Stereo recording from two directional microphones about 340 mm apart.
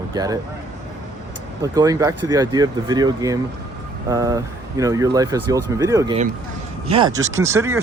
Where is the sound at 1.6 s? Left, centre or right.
Centre.